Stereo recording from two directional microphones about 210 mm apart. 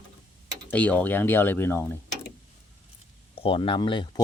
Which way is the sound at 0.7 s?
5° left (ahead or behind).